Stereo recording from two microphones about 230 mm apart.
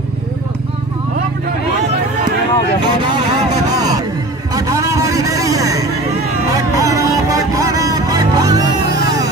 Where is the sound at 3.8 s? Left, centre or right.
Centre.